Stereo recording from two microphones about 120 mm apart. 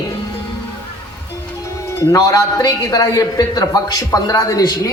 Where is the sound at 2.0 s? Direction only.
25° left (ahead or behind).